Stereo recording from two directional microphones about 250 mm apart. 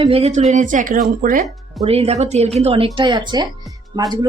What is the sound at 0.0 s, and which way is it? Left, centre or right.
Speech, right.